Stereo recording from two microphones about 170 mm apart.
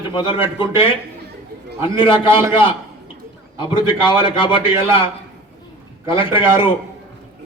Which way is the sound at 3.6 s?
30° left (ahead or behind).